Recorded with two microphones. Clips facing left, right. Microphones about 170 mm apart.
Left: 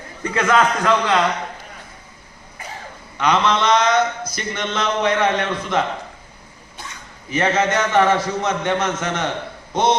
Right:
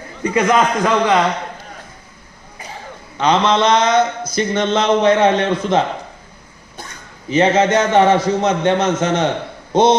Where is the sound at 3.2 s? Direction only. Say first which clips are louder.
Right 4 dB; 25° right (ahead or behind).